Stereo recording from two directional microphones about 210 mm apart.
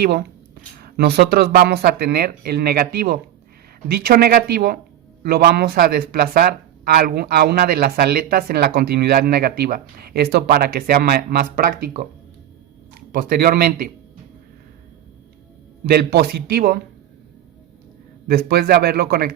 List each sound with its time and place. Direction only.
0.0 s speech: 50° right (ahead or behind)
13.1 s speech: 45° right (ahead or behind)
15.9 s speech: 50° right (ahead or behind)
18.3 s speech: 50° right (ahead or behind)